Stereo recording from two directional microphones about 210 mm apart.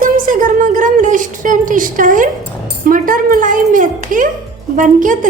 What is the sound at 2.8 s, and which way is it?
A woman's voice, 40° right (ahead or behind).